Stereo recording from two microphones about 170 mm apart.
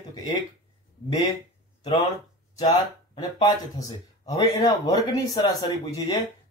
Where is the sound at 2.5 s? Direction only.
25° left (ahead or behind).